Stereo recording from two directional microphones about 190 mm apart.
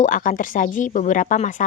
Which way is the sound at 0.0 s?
45° left (ahead or behind).